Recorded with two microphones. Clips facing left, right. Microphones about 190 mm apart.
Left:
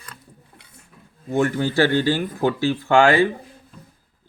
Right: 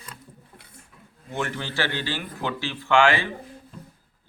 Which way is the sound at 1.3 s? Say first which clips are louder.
Left 10 dB; 40° left (ahead or behind).